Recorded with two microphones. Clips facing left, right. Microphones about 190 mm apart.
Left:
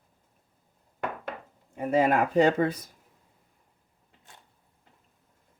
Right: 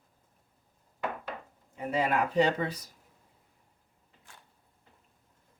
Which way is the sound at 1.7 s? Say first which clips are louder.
Left 5 dB; 45° left (ahead or behind).